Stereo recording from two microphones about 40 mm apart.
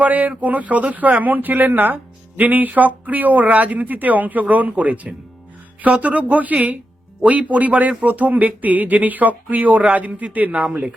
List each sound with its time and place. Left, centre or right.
0.0 s speech: right